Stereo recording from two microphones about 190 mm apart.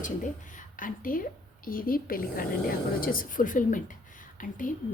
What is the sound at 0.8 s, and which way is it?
Speech, 45° left (ahead or behind).